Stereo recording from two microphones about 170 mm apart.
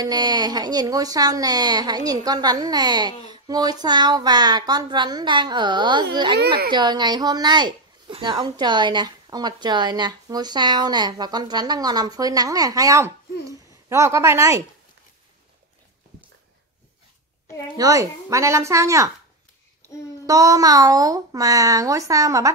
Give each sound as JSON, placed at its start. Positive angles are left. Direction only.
{"t": 0.0, "sound": "a woman's voice", "side_deg": -25}
{"t": 6.4, "sound": "speech", "side_deg": -70}
{"t": 6.7, "sound": "a woman's voice", "side_deg": -25}
{"t": 13.5, "sound": "a sound", "side_deg": -15}
{"t": 17.7, "sound": "a woman's voice", "side_deg": -20}
{"t": 19.9, "sound": "child singing", "side_deg": 20}
{"t": 20.2, "sound": "a woman's voice", "side_deg": -20}